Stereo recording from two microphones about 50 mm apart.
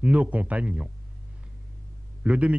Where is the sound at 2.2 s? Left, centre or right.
Right.